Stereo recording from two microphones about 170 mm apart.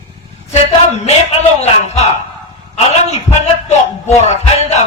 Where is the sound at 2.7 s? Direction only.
35° left (ahead or behind).